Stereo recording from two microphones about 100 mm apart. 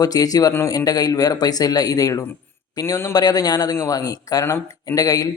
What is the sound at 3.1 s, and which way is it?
Speech, 40° left (ahead or behind).